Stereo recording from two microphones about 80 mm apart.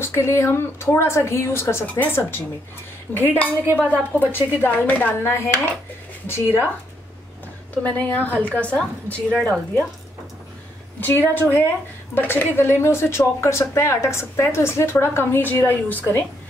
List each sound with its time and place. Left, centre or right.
0.0 s speech: left
7.7 s a woman's voice: centre
11.0 s speech: left